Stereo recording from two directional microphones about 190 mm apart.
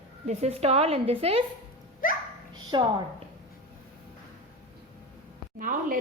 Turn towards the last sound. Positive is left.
turn(degrees=-45)  # may be behind; listen again after turning